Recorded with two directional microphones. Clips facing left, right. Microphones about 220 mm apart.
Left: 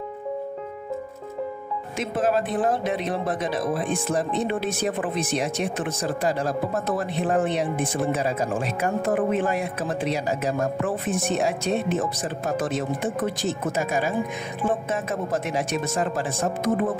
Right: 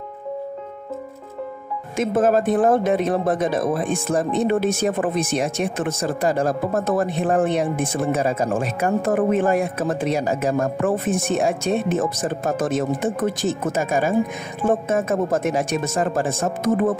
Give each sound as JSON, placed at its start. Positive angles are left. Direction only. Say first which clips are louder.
{"t": 2.0, "sound": "speech", "louder": "right 6 dB", "side_deg": -50}